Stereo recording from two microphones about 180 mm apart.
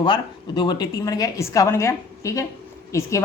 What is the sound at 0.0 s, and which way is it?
A woman's voice, 25° left (ahead or behind).